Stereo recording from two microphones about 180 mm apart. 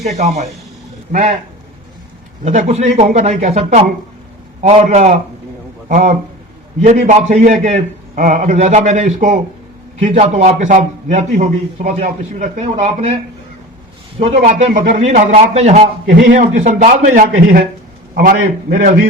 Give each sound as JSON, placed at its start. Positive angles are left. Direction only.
{"t": 0.0, "sound": "a man's voice", "side_deg": -40}
{"t": 2.4, "sound": "a man's voice", "side_deg": -40}
{"t": 14.2, "sound": "a man's voice", "side_deg": -45}